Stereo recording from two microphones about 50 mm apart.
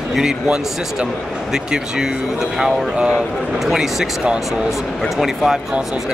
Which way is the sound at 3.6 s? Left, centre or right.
Centre.